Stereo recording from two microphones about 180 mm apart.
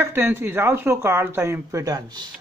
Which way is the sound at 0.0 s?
15° right (ahead or behind).